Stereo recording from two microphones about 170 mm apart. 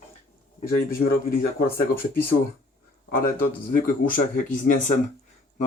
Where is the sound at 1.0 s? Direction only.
60° left (ahead or behind).